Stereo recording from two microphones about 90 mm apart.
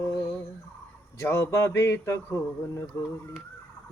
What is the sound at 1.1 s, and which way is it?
Speech, 35° left (ahead or behind).